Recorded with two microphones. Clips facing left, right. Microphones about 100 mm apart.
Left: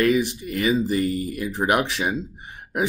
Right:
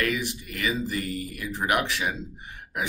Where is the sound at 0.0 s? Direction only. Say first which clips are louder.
Left 8 dB; 25° left (ahead or behind).